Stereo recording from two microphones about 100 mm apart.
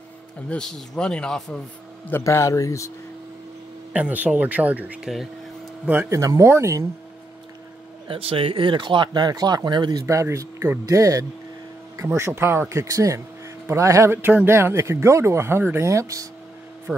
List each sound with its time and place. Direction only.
0.5 s speech: 5° left (ahead or behind)
2.2 s speech: 30° left (ahead or behind)
3.9 s speech: 15° right (ahead or behind); by 6.9 s 30° right (ahead or behind)
8.1 s speech: 65° right (ahead or behind); by 10.0 s 45° right (ahead or behind)
10.0 s speech: 30° right (ahead or behind)